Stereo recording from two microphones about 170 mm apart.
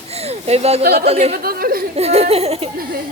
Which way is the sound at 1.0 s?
35° right (ahead or behind).